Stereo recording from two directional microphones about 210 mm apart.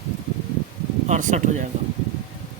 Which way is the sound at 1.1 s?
35° right (ahead or behind).